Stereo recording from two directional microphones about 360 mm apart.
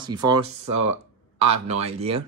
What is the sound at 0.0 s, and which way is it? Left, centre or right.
Speech, centre.